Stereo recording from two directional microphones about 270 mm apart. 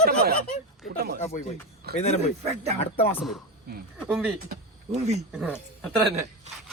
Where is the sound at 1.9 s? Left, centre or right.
Left.